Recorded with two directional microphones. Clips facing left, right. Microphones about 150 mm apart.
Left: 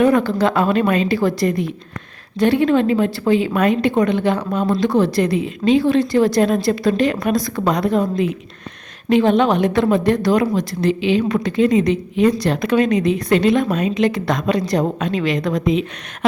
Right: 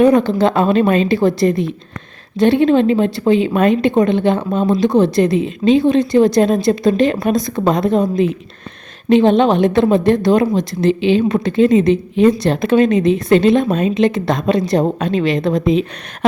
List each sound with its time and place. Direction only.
0.0 s a woman's voice: 20° right (ahead or behind)